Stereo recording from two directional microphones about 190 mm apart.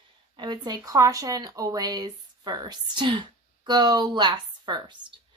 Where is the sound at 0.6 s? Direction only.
20° right (ahead or behind).